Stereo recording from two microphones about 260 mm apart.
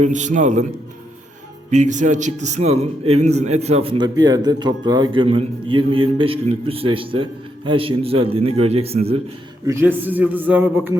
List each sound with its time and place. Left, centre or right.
0.0 s a man's voice: right
1.7 s a man's voice: right
9.6 s a man's voice: centre